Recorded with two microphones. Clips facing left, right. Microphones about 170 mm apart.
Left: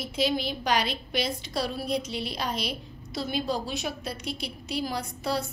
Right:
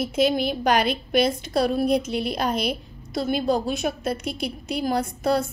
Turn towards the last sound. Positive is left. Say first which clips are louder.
# right 8 dB
turn(degrees=-50)  # may be behind; listen again after turning